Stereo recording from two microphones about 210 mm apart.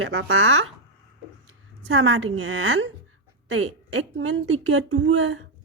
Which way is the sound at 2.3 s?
85° right.